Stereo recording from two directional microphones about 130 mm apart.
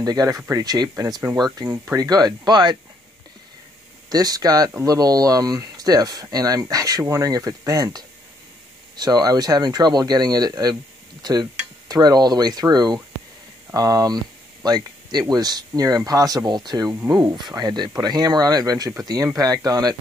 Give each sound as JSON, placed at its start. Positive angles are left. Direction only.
{"t": 0.0, "sound": "speech", "side_deg": -30}
{"t": 4.1, "sound": "speech", "side_deg": -30}
{"t": 11.9, "sound": "speech", "side_deg": -30}